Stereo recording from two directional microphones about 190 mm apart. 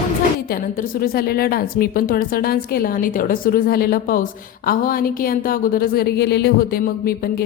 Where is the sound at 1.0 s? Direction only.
55° left (ahead or behind).